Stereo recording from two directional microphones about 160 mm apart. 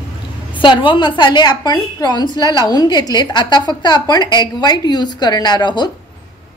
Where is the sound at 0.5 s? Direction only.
30° left (ahead or behind).